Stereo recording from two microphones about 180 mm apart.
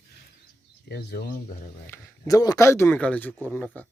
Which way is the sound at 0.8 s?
60° left (ahead or behind).